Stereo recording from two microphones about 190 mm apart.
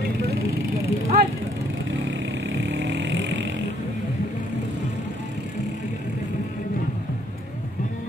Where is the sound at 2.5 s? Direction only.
70° right (ahead or behind).